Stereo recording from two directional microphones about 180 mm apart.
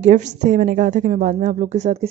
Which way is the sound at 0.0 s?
40° right (ahead or behind).